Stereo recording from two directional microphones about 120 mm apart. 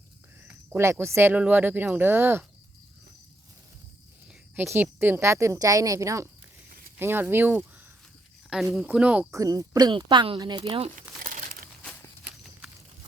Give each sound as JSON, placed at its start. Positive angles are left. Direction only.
{"t": 0.4, "sound": "speech", "side_deg": -20}
{"t": 4.5, "sound": "speech", "side_deg": -20}
{"t": 8.7, "sound": "speech", "side_deg": -5}
{"t": 9.3, "sound": "speech", "side_deg": -30}
{"t": 12.2, "sound": "walk", "side_deg": -5}